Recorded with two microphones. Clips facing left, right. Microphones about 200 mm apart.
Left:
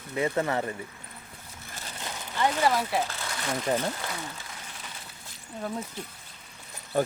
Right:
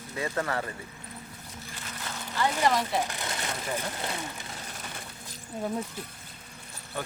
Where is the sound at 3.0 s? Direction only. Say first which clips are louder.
Even; 15° right (ahead or behind).